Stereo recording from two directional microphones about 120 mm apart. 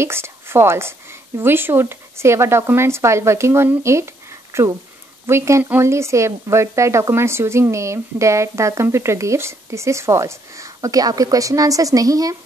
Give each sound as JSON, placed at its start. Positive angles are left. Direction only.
{"t": 0.0, "sound": "a woman's voice", "side_deg": -20}